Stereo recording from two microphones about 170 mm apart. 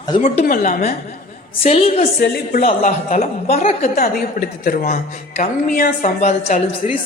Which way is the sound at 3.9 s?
65° left (ahead or behind).